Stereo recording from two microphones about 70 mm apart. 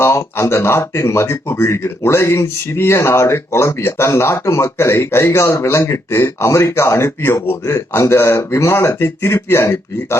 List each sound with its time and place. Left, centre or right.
0.0 s speech: left